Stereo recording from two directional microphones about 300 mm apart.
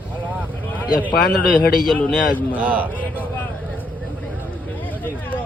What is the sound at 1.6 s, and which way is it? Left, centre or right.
Speech, left.